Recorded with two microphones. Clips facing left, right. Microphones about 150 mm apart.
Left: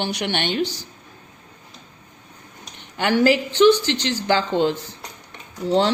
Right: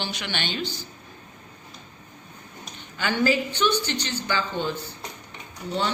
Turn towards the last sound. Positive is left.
turn(degrees=90)